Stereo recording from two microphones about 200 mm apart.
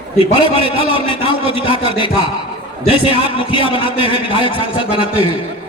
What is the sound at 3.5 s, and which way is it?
A man's voice, 25° left (ahead or behind).